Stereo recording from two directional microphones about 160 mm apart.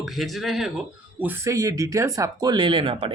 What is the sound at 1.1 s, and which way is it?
Speech, 10° right (ahead or behind).